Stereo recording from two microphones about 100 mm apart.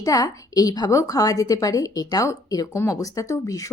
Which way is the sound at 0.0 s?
35° left (ahead or behind).